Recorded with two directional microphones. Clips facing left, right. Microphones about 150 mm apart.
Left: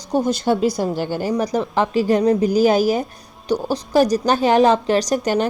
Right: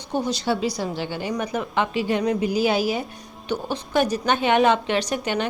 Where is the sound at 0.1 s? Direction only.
50° left (ahead or behind).